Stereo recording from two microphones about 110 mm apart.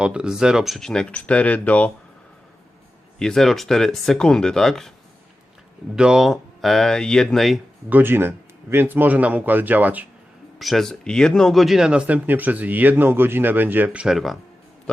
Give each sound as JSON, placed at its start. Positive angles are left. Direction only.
{"t": 0.0, "sound": "speech", "side_deg": -10}
{"t": 3.2, "sound": "speech", "side_deg": 5}
{"t": 6.0, "sound": "speech", "side_deg": -5}
{"t": 7.9, "sound": "speech", "side_deg": -20}
{"t": 10.6, "sound": "speech", "side_deg": 0}